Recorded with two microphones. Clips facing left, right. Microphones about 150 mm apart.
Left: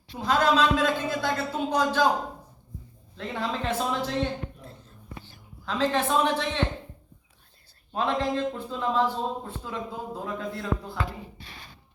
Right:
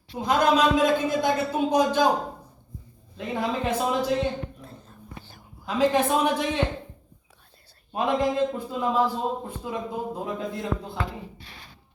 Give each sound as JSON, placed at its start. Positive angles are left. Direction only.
{"t": 0.2, "sound": "a man's voice", "side_deg": -15}
{"t": 3.2, "sound": "a man's voice", "side_deg": -15}
{"t": 5.6, "sound": "a man's voice", "side_deg": -15}
{"t": 7.9, "sound": "a man's voice", "side_deg": -15}